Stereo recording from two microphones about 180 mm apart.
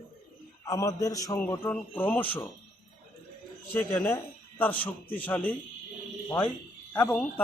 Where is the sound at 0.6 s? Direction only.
20° left (ahead or behind).